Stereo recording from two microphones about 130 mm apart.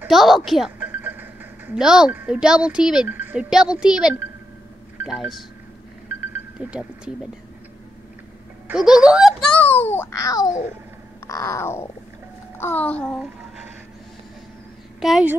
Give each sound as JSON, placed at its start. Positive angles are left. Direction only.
{"t": 0.1, "sound": "speech", "side_deg": 0}
{"t": 0.7, "sound": "a woman's voice", "side_deg": -15}
{"t": 6.6, "sound": "speech", "side_deg": -10}
{"t": 8.7, "sound": "speech", "side_deg": -5}
{"t": 9.4, "sound": "a child's voice", "side_deg": 10}
{"t": 11.2, "sound": "grunt", "side_deg": 25}
{"t": 12.5, "sound": "a child's voice", "side_deg": 15}
{"t": 15.0, "sound": "speech", "side_deg": 0}